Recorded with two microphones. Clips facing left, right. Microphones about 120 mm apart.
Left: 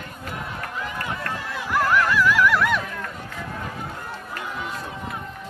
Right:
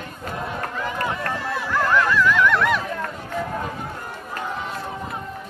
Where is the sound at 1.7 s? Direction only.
10° left (ahead or behind).